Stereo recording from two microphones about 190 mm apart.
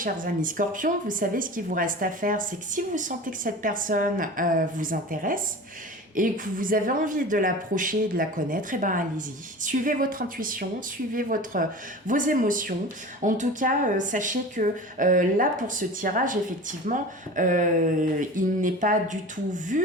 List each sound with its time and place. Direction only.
0.0 s speech: 45° right (ahead or behind)